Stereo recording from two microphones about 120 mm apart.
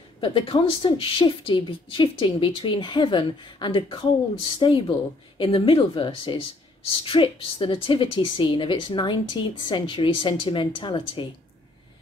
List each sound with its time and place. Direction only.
0.2 s a woman's voice: 45° left (ahead or behind)